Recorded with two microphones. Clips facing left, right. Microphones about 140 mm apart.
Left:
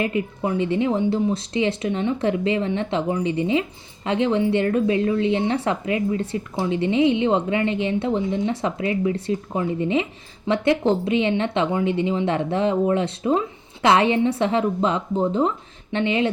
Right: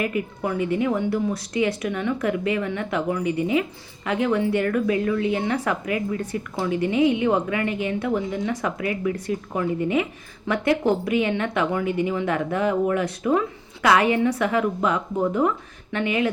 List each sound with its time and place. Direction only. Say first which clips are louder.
0.0 s speech: left 2 dB; 25° left (ahead or behind)